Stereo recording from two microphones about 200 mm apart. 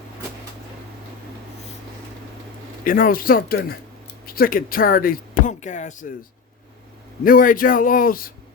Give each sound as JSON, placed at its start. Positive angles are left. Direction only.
{"t": 2.8, "sound": "speech", "side_deg": 45}
{"t": 7.3, "sound": "speech", "side_deg": 45}